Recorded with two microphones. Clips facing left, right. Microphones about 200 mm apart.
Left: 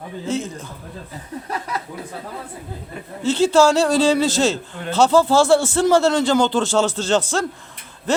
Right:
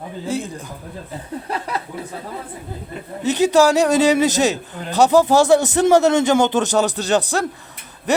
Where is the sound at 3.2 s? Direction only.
15° right (ahead or behind).